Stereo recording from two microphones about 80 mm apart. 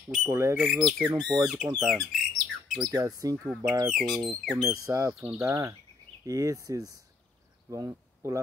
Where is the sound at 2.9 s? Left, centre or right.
Right.